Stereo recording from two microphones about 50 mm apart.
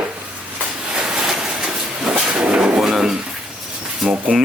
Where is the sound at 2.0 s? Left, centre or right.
Centre.